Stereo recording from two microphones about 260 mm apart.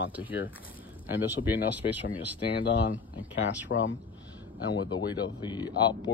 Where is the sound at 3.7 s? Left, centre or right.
Left.